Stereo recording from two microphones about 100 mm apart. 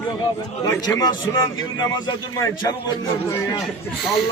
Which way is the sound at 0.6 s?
35° left (ahead or behind).